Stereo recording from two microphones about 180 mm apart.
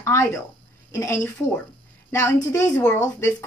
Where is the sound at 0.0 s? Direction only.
15° left (ahead or behind).